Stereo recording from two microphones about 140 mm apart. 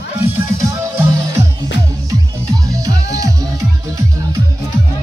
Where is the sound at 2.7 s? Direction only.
25° right (ahead or behind).